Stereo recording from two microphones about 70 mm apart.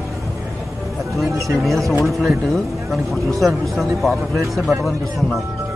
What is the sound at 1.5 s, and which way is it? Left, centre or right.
Speech, centre.